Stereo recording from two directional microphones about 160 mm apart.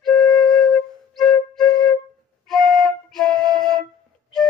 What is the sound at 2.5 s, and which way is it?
Flute, centre (ahead or behind).